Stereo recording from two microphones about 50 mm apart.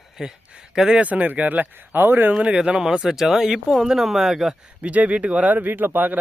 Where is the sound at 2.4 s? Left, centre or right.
Right.